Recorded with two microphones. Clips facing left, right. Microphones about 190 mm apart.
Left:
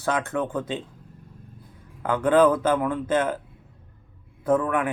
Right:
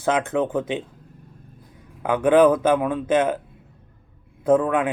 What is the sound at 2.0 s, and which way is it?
Speech, 15° right (ahead or behind).